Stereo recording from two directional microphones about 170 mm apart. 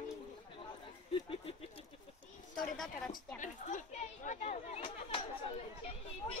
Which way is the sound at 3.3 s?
45° left (ahead or behind).